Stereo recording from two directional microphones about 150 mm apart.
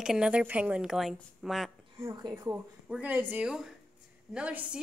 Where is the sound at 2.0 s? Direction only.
25° right (ahead or behind).